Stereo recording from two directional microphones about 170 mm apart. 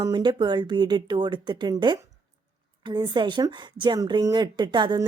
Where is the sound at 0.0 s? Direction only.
25° right (ahead or behind).